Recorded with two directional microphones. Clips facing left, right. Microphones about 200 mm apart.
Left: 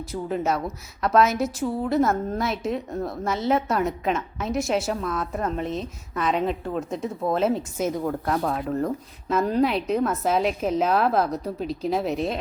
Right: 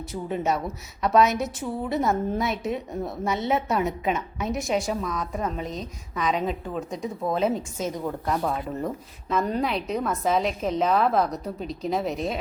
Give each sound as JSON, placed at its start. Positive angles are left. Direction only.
{"t": 0.1, "sound": "a woman's voice", "side_deg": 0}